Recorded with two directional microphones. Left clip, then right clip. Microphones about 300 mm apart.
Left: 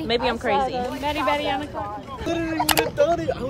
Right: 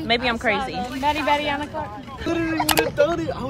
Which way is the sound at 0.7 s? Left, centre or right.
Left.